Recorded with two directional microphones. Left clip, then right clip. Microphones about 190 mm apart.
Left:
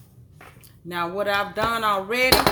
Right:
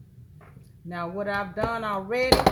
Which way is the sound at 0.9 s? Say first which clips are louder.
Left 6 dB; 30° left (ahead or behind).